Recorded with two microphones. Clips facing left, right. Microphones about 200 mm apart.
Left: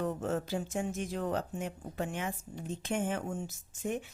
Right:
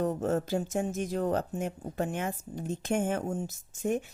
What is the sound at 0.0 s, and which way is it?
Speech, 40° right (ahead or behind).